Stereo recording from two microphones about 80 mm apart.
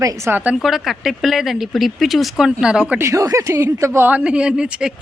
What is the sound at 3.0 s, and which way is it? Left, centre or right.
Speech, right.